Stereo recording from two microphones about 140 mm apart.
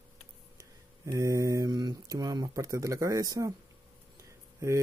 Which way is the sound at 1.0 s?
25° right (ahead or behind).